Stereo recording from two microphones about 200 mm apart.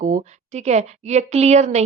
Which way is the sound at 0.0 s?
35° right (ahead or behind).